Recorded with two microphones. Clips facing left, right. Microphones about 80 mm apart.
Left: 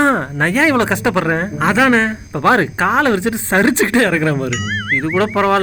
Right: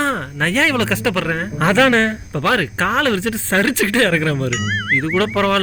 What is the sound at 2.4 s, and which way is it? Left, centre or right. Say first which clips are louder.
Speech: left 5 dB; left.